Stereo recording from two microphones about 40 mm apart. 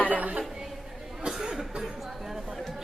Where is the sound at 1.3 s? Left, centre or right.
Centre.